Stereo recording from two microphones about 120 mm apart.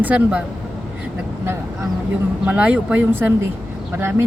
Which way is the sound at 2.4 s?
10° right (ahead or behind).